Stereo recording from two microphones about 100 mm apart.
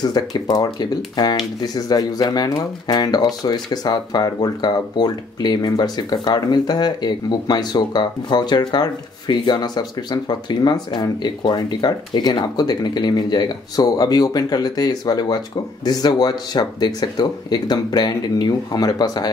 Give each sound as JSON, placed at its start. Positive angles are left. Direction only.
{"t": 0.0, "sound": "speech", "side_deg": 40}